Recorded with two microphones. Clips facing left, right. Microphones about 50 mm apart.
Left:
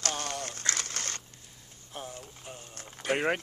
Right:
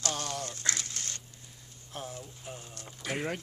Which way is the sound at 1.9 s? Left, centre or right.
Centre.